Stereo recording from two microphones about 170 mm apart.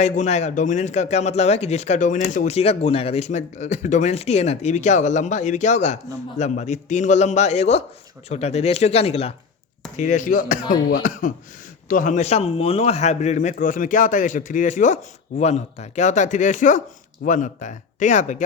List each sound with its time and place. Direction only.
0.0 s speech: 40° left (ahead or behind)
10.0 s speech: 45° left (ahead or behind)
11.9 s speech: 50° left (ahead or behind)